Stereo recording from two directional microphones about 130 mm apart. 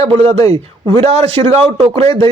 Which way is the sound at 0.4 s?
40° right (ahead or behind).